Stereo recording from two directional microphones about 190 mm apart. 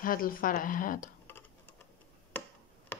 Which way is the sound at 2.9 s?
10° left (ahead or behind).